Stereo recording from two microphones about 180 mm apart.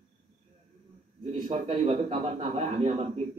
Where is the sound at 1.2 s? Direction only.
35° right (ahead or behind).